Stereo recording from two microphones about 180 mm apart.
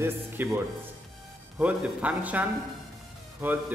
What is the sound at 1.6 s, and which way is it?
A man's voice, 5° right (ahead or behind).